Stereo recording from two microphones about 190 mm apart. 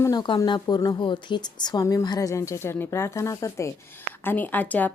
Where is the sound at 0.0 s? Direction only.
20° left (ahead or behind).